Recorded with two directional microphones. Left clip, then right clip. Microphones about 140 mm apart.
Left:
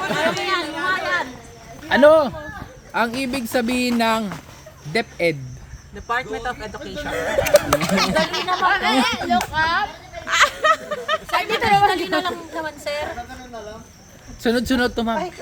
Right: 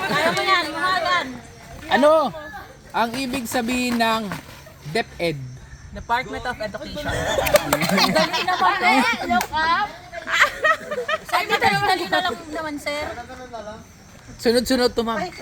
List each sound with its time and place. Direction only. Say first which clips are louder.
0.0 s chatter: right 1 dB; 10° left (ahead or behind)
1.9 s speech: left 3 dB; 35° left (ahead or behind)
6.1 s speech: even; 15° left (ahead or behind)
7.1 s speech: left 1 dB; 30° left (ahead or behind)
7.7 s speech: even; 10° left (ahead or behind)
14.4 s speech: right 1 dB; 30° left (ahead or behind)